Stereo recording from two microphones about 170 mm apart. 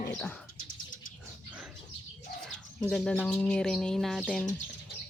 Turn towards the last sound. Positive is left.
turn(degrees=0)  # may be behind; listen again after turning